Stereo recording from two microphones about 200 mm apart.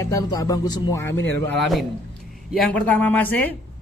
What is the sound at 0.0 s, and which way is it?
Speech, 15° left (ahead or behind).